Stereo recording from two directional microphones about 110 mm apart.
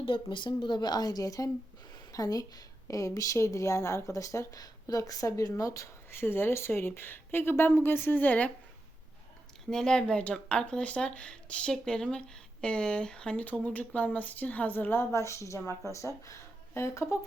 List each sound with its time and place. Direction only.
0.0 s a woman's voice: 50° left (ahead or behind); by 8.5 s 15° left (ahead or behind)
9.6 s a woman's voice: 5° left (ahead or behind); by 17.2 s 25° left (ahead or behind)